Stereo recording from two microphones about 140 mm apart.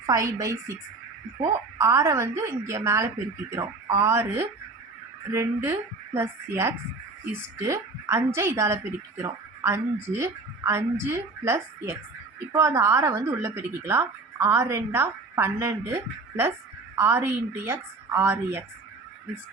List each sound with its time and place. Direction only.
0.0 s a woman's voice: 25° right (ahead or behind)
1.8 s a woman's voice: 20° right (ahead or behind)